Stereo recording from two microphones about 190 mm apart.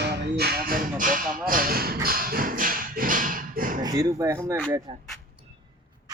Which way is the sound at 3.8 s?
20° right (ahead or behind).